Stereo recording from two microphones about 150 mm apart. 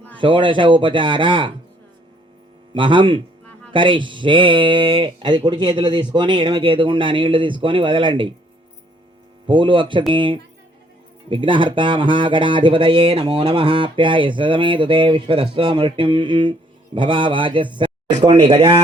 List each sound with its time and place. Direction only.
0.2 s speech: 35° right (ahead or behind)
2.7 s speech: 35° right (ahead or behind)
9.5 s speech: 35° right (ahead or behind)